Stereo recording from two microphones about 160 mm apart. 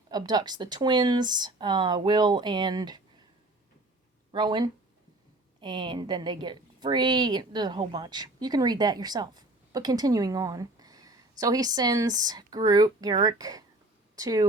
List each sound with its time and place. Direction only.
0.1 s a woman's voice: 25° right (ahead or behind)
4.3 s a woman's voice: 30° right (ahead or behind)